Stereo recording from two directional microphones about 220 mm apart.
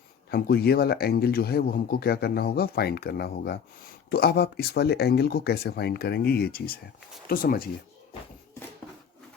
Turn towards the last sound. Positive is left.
turn(degrees=40)  # may be behind; listen again after turning